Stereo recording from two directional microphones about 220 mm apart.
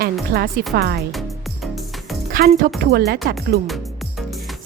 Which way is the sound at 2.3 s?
40° right (ahead or behind).